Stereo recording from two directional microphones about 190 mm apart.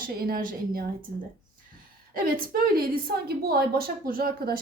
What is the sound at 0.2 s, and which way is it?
Speech, 50° right (ahead or behind).